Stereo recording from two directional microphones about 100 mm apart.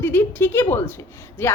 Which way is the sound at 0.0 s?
20° left (ahead or behind).